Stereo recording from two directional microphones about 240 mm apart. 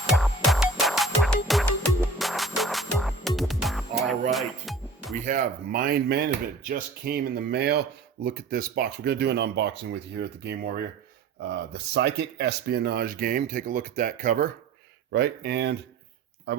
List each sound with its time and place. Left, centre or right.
0.1 s music: centre
5.2 s speech: right
15.1 s speech: right